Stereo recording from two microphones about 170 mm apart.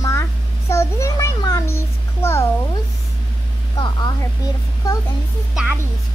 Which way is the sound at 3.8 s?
25° left (ahead or behind).